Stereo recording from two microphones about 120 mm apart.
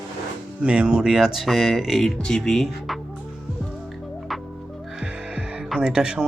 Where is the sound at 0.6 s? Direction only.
10° right (ahead or behind).